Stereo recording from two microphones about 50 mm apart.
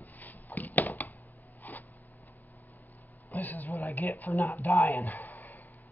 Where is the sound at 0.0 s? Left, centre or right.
Left.